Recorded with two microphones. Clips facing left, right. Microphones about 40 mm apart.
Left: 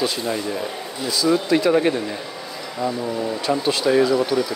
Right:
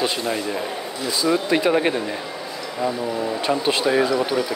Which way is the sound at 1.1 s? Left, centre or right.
Right.